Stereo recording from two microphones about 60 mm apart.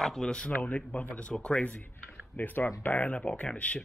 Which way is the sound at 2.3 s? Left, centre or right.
Left.